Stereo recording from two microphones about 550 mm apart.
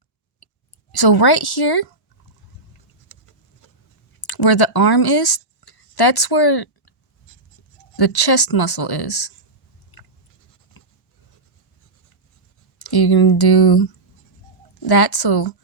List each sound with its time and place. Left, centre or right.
0.9 s speech: left
4.2 s speech: left
7.9 s speech: left
10.8 s writing: left
12.8 s speech: left